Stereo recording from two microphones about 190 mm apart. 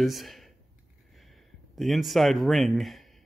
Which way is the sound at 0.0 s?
Centre (ahead or behind).